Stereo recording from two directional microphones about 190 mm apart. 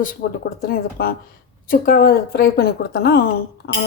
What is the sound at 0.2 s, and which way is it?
A woman's voice, 55° left (ahead or behind).